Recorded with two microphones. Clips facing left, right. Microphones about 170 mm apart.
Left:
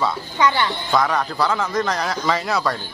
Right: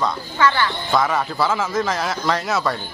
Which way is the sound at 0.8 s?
Centre (ahead or behind).